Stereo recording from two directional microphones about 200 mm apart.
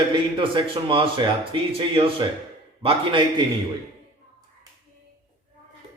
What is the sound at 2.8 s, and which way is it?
Speech, 25° right (ahead or behind).